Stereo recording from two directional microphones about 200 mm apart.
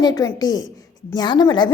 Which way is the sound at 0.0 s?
15° left (ahead or behind).